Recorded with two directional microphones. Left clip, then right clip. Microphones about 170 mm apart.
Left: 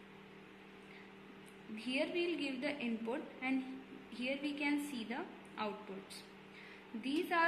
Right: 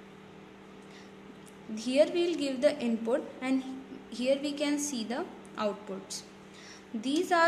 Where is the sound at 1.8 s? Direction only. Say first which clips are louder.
Right 11 dB; 45° right (ahead or behind).